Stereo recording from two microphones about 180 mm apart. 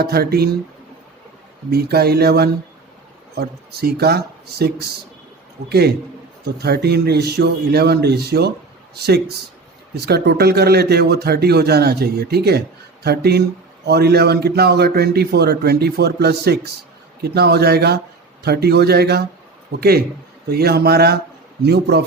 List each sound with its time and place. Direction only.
0.0 s speech: 60° right (ahead or behind)
1.7 s a man's voice: 60° right (ahead or behind)